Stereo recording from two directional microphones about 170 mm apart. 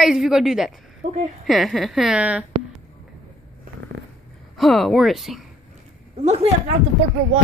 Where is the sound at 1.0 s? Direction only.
45° right (ahead or behind).